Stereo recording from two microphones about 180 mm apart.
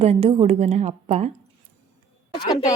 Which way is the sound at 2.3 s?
25° left (ahead or behind).